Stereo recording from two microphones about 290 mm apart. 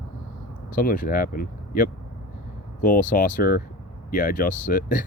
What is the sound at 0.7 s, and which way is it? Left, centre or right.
Speech, left.